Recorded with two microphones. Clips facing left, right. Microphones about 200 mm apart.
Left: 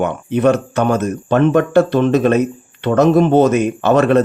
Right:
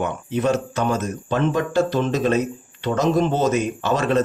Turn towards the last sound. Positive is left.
turn(degrees=60)  # may be behind; listen again after turning